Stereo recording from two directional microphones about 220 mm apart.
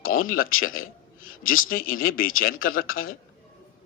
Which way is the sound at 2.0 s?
40° left (ahead or behind).